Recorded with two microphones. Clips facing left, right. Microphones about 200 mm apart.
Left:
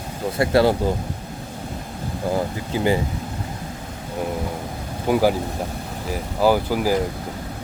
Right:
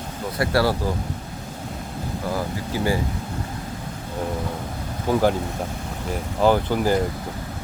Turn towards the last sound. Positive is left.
turn(degrees=5)  # may be behind; listen again after turning